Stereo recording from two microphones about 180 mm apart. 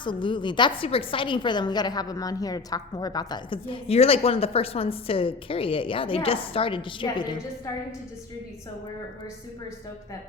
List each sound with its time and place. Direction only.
0.0 s a woman's voice: 25° left (ahead or behind)